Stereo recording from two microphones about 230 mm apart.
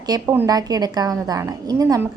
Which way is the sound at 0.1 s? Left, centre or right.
Centre.